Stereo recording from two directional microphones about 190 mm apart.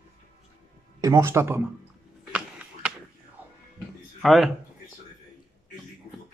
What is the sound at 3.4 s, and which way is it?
Music, 10° right (ahead or behind).